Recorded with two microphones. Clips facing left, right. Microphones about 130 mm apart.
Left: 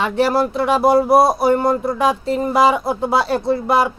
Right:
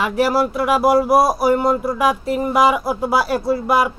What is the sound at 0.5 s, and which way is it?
Speech, 25° left (ahead or behind).